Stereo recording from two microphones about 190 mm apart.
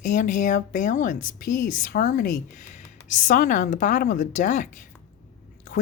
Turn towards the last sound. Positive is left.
turn(degrees=40)  # may be behind; listen again after turning